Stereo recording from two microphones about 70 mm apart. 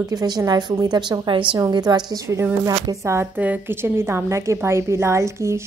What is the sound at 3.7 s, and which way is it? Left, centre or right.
A woman's voice, right.